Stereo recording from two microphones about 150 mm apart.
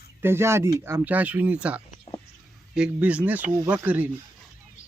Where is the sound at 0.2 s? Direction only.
15° right (ahead or behind).